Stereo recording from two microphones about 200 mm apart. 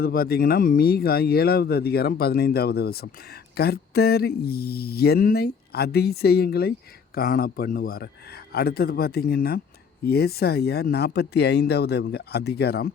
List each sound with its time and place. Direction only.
0.0 s speech: 50° left (ahead or behind)